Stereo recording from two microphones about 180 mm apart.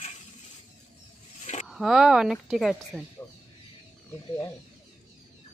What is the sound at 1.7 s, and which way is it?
Speech, centre (ahead or behind).